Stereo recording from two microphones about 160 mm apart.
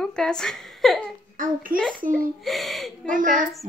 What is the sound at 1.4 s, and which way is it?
Speech, 60° right (ahead or behind).